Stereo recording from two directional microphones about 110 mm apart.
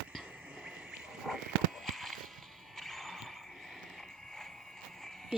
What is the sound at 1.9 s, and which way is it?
Music, centre (ahead or behind).